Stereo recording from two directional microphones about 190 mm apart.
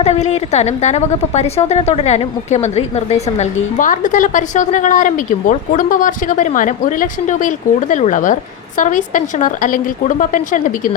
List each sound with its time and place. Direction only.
0.0 s a woman's voice: 35° left (ahead or behind)